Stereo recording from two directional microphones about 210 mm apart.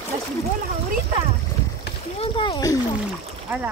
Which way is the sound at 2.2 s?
20° left (ahead or behind).